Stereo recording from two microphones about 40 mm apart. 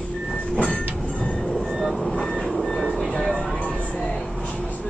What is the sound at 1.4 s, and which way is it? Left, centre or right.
Train, centre.